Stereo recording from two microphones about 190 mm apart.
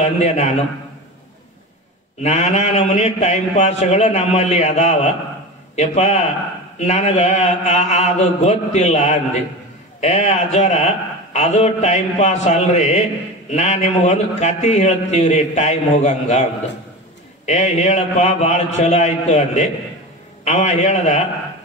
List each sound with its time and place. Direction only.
0.0 s a man's voice: 35° left (ahead or behind)
2.2 s a man's voice: 35° left (ahead or behind)
17.5 s a man's voice: 35° left (ahead or behind)